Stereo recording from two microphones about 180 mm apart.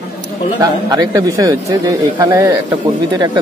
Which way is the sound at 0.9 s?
20° right (ahead or behind).